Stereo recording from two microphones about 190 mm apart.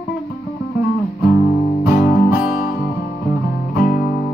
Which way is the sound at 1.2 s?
50° left (ahead or behind).